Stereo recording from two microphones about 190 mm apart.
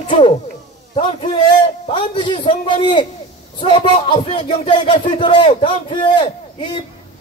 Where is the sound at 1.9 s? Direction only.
25° left (ahead or behind).